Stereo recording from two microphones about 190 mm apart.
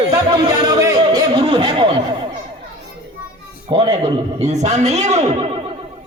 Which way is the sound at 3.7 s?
30° right (ahead or behind).